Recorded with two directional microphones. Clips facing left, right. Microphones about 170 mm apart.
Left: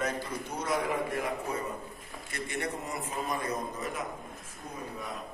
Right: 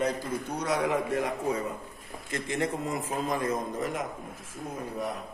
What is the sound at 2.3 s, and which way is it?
A man's voice, 90° right.